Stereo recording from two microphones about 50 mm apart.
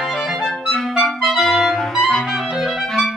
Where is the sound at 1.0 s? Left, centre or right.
Centre.